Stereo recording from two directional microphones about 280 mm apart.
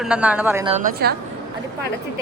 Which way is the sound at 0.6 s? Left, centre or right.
Right.